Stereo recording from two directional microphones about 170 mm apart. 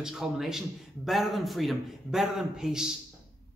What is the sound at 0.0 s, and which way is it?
A man's voice, centre (ahead or behind).